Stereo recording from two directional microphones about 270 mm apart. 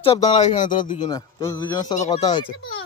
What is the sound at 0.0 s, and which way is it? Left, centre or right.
A man's voice, centre.